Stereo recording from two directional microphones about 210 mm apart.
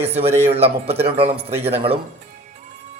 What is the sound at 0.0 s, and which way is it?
Speech, 30° right (ahead or behind).